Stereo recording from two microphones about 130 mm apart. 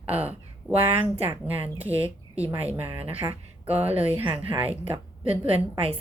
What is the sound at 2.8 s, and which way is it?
A woman's voice, 45° right (ahead or behind).